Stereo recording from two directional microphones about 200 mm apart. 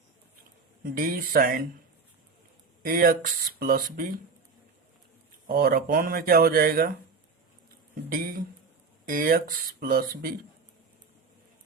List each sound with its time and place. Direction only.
0.9 s speech: 45° right (ahead or behind)
2.8 s speech: 45° right (ahead or behind)
5.5 s speech: 50° right (ahead or behind)
8.1 s speech: 45° right (ahead or behind)